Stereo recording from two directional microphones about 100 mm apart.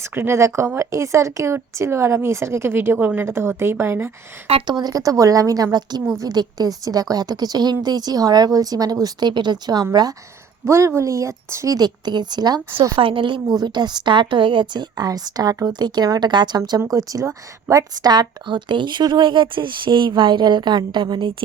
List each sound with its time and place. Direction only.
0.0 s speech: 25° right (ahead or behind)
4.6 s a woman's voice: 45° right (ahead or behind)
10.7 s a woman's voice: 30° right (ahead or behind); by 12.5 s 45° right (ahead or behind)
13.0 s a woman's voice: 60° right (ahead or behind)
13.5 s speech: 45° right (ahead or behind)